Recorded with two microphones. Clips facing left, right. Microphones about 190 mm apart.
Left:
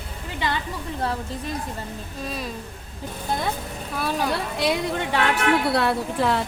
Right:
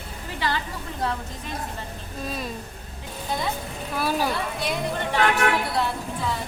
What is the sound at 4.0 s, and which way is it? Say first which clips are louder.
Speech: right 1 dB; 5° right (ahead or behind).